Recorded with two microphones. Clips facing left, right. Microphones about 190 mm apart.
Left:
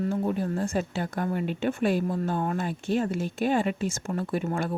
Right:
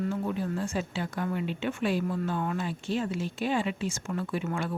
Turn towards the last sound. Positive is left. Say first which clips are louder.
# left 3 dB
turn(degrees=40)  # may be behind; listen again after turning